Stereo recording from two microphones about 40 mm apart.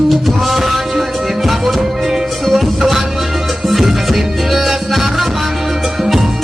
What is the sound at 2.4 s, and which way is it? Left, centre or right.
Music, centre.